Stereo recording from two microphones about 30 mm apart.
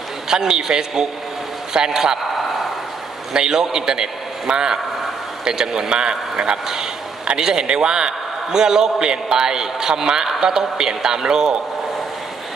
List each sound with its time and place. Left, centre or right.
0.3 s a man's voice: right
3.3 s a man's voice: right